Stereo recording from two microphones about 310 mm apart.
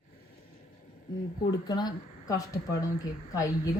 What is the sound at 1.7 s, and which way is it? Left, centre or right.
A woman's voice, centre.